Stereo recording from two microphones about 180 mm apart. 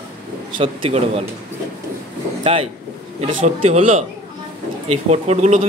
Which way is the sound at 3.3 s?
40° right (ahead or behind).